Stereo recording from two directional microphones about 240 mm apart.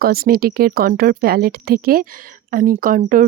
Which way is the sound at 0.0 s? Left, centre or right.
Right.